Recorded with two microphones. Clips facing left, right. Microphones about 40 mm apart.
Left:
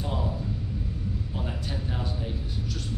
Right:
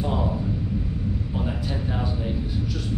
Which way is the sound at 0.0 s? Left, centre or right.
Centre.